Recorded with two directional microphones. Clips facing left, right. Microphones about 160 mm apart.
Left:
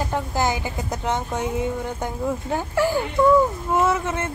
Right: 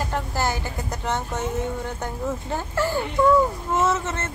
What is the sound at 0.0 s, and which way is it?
Speech, 15° left (ahead or behind).